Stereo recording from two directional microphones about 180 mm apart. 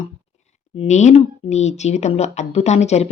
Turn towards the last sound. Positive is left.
turn(degrees=35)  # may be behind; listen again after turning